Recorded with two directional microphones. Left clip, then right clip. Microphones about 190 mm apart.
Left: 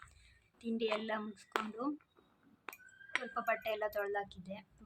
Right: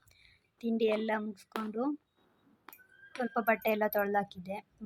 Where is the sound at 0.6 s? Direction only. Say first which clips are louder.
Right 7 dB; 25° right (ahead or behind).